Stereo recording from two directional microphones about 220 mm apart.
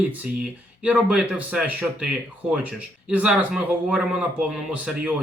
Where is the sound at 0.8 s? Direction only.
5° right (ahead or behind).